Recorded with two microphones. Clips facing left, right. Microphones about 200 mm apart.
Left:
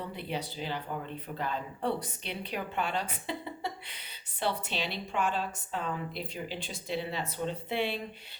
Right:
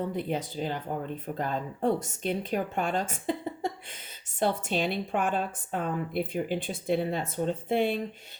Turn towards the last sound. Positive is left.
turn(degrees=-45)  # may be behind; listen again after turning